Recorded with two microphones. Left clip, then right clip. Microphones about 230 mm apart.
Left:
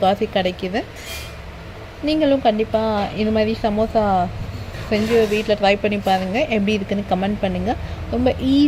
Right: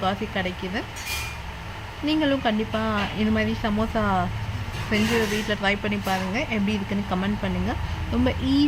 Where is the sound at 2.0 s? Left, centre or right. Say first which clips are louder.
Left 6 dB; centre.